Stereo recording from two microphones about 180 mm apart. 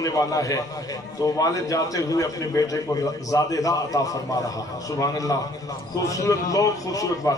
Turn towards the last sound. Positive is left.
turn(degrees=20)  # may be behind; listen again after turning